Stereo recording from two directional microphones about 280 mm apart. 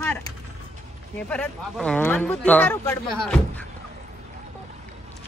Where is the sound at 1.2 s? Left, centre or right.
Centre.